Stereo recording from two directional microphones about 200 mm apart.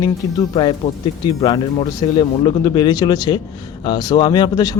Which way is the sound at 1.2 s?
25° left (ahead or behind).